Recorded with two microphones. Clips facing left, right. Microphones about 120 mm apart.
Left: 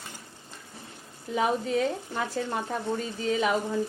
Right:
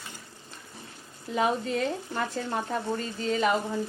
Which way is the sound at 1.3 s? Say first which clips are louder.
Left 1 dB; 5° left (ahead or behind).